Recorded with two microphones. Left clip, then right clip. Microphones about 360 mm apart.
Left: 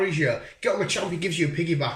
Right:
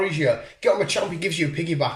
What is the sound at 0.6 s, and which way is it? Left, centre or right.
Speech, centre.